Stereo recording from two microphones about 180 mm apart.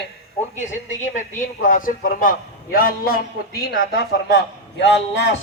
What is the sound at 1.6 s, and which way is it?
Speech, 50° left (ahead or behind).